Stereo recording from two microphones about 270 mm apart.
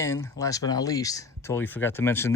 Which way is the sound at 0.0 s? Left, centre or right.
Centre.